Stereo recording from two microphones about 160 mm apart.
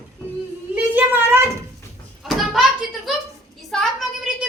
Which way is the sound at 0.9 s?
15° right (ahead or behind).